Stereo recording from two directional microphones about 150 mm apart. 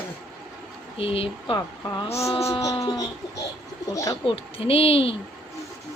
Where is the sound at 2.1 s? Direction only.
20° left (ahead or behind).